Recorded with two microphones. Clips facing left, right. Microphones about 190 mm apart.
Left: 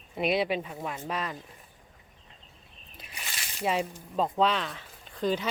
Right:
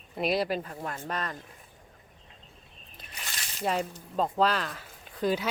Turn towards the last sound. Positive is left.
turn(degrees=-5)  # may be behind; listen again after turning